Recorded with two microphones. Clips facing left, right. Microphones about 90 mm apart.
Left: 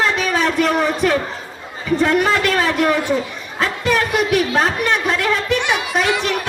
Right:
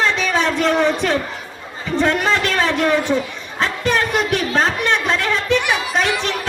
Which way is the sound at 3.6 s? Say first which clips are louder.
Left 1 dB; 25° right (ahead or behind).